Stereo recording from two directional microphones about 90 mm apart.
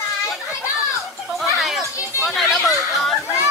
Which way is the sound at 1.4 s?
Centre (ahead or behind).